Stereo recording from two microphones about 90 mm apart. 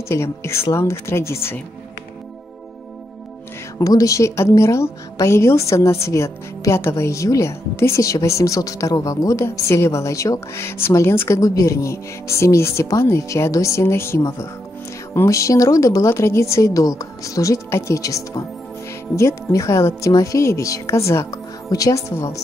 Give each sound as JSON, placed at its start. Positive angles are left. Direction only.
{"t": 0.1, "sound": "a woman's voice", "side_deg": 30}
{"t": 3.7, "sound": "a woman's voice", "side_deg": 40}